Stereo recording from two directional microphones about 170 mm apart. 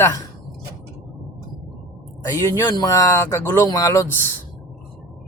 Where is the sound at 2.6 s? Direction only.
25° left (ahead or behind).